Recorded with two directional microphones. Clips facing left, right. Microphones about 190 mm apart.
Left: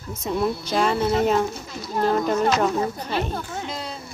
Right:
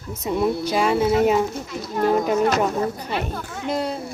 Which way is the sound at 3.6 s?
55° right (ahead or behind).